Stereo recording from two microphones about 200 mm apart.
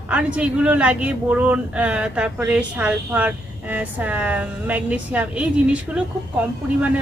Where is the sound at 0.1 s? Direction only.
5° right (ahead or behind).